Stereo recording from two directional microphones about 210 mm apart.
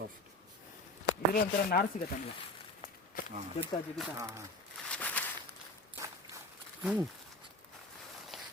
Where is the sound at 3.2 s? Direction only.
40° left (ahead or behind).